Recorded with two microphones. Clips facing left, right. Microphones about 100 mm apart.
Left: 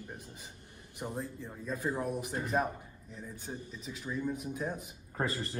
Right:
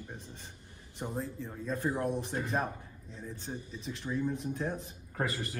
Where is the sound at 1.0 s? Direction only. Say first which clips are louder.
Right 1 dB; 15° right (ahead or behind).